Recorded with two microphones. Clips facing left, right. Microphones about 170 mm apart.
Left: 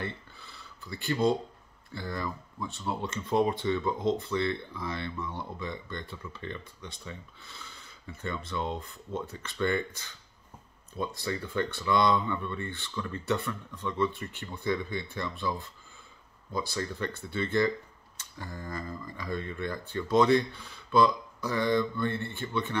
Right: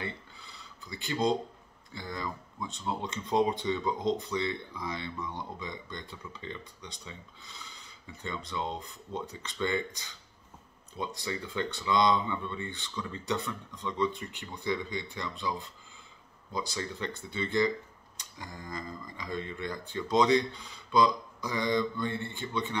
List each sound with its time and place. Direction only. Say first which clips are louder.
2.0 s speech: left 2 dB; 15° right (ahead or behind)